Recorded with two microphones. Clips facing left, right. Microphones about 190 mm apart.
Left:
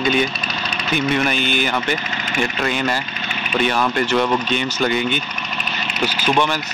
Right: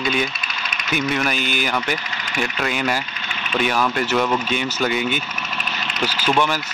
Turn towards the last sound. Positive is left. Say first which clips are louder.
# left 1 dB
turn(degrees=15)  # may be behind; listen again after turning